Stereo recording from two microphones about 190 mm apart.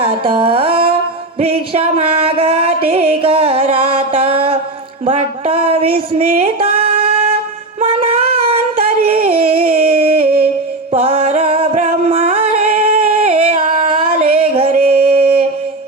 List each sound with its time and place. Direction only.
0.0 s music: 30° right (ahead or behind)
5.0 s a sound: 30° right (ahead or behind)
10.2 s music: 50° right (ahead or behind)
10.9 s music: 30° right (ahead or behind)